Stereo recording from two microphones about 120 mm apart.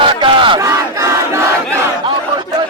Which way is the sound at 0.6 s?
25° right (ahead or behind).